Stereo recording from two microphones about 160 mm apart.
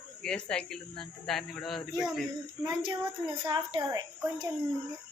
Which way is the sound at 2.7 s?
30° right (ahead or behind).